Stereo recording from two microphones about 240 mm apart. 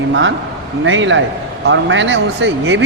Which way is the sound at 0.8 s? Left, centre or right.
Right.